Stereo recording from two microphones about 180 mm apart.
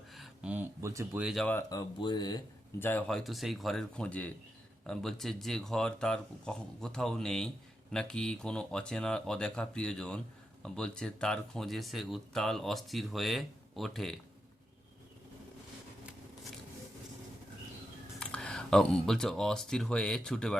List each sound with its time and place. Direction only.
0.1 s a sound: 5° right (ahead or behind)
1.2 s speech: centre (ahead or behind)
1.5 s speech: 20° left (ahead or behind)
2.8 s speech: 5° left (ahead or behind)
18.2 s speech: 5° left (ahead or behind)